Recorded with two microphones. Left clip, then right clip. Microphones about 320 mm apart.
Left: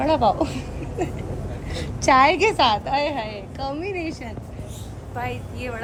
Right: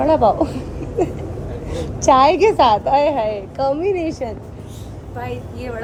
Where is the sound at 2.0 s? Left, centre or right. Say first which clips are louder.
Right 4 dB; left.